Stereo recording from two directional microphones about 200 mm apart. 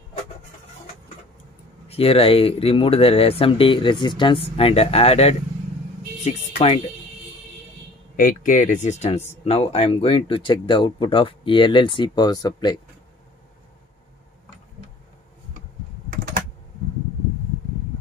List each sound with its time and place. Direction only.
1.9 s speech: 30° left (ahead or behind)
8.2 s speech: 45° left (ahead or behind); by 12.8 s 20° left (ahead or behind)